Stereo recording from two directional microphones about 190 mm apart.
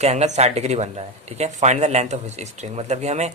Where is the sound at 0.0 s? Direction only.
35° right (ahead or behind).